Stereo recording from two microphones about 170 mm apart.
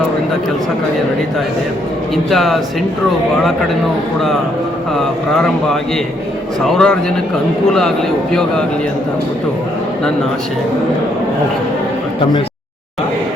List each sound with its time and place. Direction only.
2.3 s speech: centre (ahead or behind)
4.9 s speech: 5° left (ahead or behind)
8.3 s speech: 5° left (ahead or behind)